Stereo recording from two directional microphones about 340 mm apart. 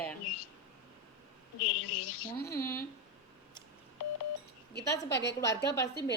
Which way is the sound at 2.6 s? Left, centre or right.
Left.